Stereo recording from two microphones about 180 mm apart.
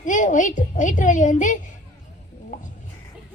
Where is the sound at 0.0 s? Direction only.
45° left (ahead or behind).